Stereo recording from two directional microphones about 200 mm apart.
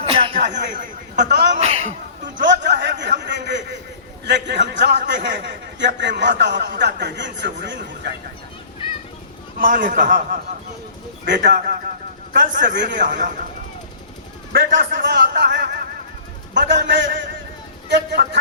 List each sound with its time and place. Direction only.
0.0 s a sound: 25° right (ahead or behind)
0.3 s speech: 40° right (ahead or behind)
1.3 s a man's voice: 55° right (ahead or behind)
1.5 s a sound: 30° right (ahead or behind)
2.6 s a sound: 60° right (ahead or behind)
4.3 s a man's voice: 60° right (ahead or behind)
9.6 s a man's voice: 40° right (ahead or behind)
11.5 s a man's voice: 45° right (ahead or behind)
14.5 s a man's voice: 60° right (ahead or behind)
15.3 s speech: 45° right (ahead or behind)
16.6 s a man's voice: 60° right (ahead or behind)